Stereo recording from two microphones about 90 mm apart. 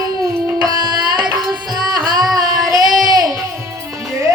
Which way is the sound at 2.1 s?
45° right (ahead or behind).